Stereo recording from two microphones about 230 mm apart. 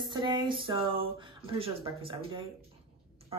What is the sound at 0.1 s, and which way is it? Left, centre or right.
Speech, centre.